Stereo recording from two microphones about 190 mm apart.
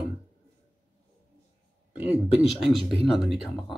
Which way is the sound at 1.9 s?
10° right (ahead or behind).